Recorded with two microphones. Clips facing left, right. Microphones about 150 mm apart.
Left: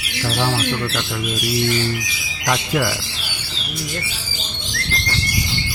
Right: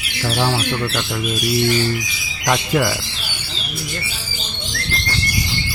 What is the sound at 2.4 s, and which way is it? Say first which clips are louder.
Speech: right 2 dB; 25° right (ahead or behind).